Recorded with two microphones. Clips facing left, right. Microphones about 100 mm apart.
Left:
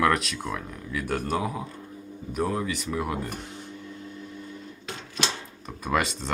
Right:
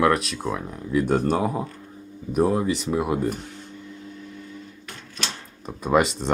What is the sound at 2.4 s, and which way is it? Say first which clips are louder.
Speech: right 5 dB; 20° right (ahead or behind).